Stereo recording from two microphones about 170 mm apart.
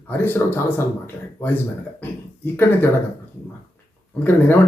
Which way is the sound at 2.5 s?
10° left (ahead or behind).